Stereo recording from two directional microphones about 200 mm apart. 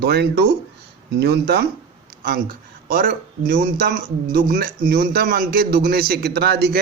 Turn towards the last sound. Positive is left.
turn(degrees=-55)  # may be behind; listen again after turning